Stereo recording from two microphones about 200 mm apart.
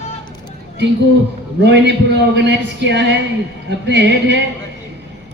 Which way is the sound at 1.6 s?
60° right (ahead or behind).